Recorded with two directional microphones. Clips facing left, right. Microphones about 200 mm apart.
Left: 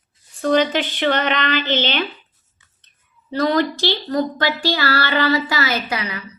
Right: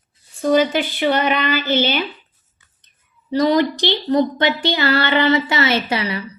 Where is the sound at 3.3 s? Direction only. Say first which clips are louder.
Right 3 dB; 15° right (ahead or behind).